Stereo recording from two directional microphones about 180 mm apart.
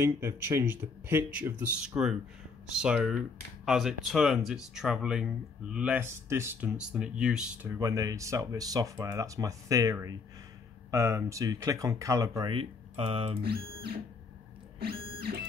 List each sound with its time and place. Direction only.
0.0 s speech: 15° right (ahead or behind)
7.8 s speech: 20° right (ahead or behind)
12.5 s speech: 30° right (ahead or behind)
14.8 s music: 60° right (ahead or behind)